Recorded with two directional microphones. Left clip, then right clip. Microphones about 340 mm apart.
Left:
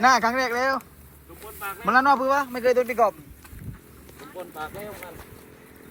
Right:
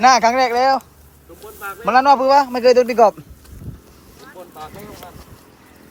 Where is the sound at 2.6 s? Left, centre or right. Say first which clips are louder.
Right 7 dB; right.